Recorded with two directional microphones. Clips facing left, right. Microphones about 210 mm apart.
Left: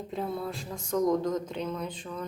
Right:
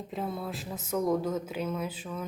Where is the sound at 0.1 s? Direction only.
Centre (ahead or behind).